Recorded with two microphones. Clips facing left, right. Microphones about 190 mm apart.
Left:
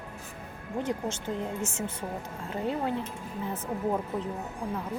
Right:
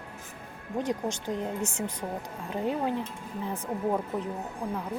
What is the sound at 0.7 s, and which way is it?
Speech, 15° right (ahead or behind).